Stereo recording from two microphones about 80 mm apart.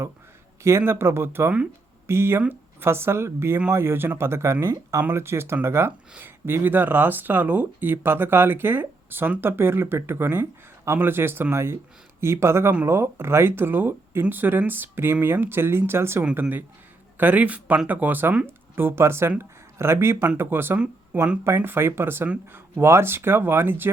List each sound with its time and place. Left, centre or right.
0.8 s speech: right
20.7 s speech: centre
21.4 s speech: right